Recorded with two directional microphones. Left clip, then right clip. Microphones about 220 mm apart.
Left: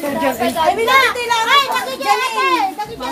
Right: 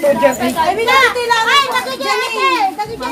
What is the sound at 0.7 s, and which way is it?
A child's voice, 20° left (ahead or behind).